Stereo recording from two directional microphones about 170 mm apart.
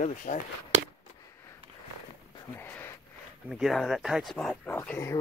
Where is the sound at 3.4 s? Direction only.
Centre (ahead or behind).